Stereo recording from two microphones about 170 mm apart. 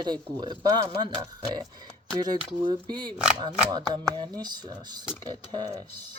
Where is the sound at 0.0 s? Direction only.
25° right (ahead or behind).